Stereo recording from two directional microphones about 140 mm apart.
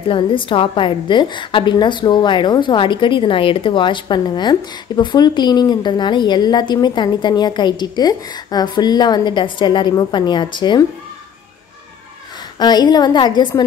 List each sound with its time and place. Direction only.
0.1 s a woman's voice: 35° left (ahead or behind)
12.5 s a woman's voice: 30° left (ahead or behind)